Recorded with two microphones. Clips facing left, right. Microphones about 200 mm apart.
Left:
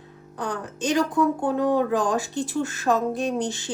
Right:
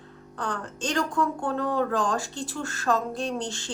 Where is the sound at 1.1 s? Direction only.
20° left (ahead or behind).